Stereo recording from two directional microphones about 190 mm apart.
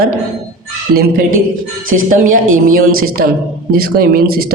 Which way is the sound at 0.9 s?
50° right (ahead or behind).